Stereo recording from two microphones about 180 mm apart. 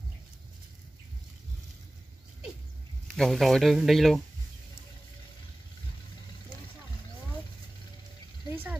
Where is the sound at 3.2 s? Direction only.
Centre (ahead or behind).